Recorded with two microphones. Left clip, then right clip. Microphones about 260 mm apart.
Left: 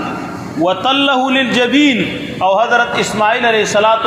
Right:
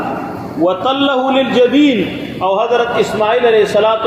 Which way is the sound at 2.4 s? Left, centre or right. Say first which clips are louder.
Left 2 dB; left.